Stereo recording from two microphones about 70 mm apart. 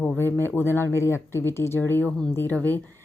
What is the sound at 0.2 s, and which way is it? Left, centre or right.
Speech, left.